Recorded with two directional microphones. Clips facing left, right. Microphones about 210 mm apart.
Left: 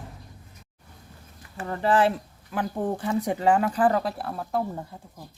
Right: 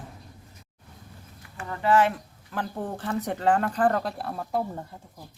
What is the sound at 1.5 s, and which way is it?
Speech, 35° left (ahead or behind).